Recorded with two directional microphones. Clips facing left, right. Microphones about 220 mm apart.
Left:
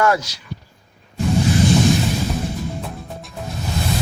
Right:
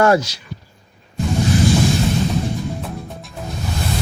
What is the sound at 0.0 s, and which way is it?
Speech, 30° right (ahead or behind).